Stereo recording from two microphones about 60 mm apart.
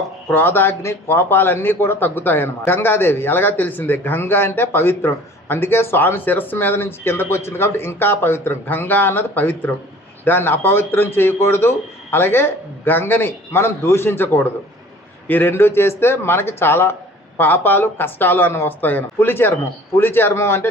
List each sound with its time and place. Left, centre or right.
0.3 s a man's voice: left